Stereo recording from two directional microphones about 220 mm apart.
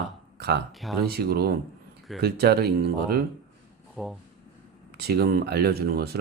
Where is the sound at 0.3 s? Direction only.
50° right (ahead or behind).